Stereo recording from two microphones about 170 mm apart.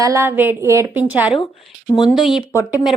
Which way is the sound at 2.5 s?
20° left (ahead or behind).